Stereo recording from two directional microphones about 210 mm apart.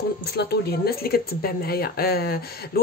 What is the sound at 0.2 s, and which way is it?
Speech, 50° left (ahead or behind).